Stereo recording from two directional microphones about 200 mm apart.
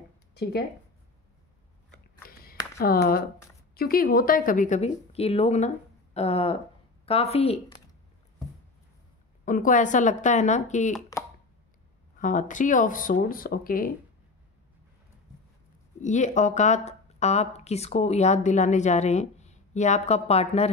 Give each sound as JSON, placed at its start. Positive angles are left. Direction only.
{"t": 0.3, "sound": "speech", "side_deg": 55}
{"t": 2.2, "sound": "a sound", "side_deg": 50}
{"t": 2.8, "sound": "speech", "side_deg": 50}
{"t": 9.4, "sound": "speech", "side_deg": 40}
{"t": 12.2, "sound": "speech", "side_deg": 40}
{"t": 16.0, "sound": "speech", "side_deg": 35}